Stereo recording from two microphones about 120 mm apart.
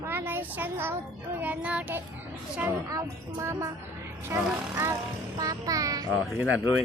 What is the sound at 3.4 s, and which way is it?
Speech, 25° right (ahead or behind).